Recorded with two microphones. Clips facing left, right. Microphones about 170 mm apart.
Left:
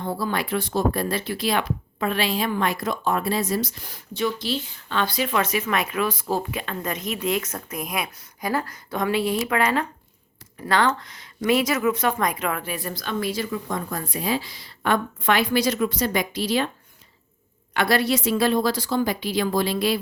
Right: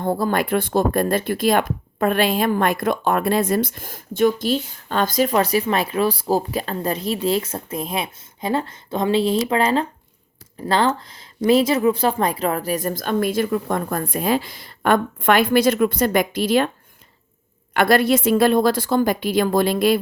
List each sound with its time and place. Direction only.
0.0 s speech: 50° right (ahead or behind)
17.7 s speech: 50° right (ahead or behind)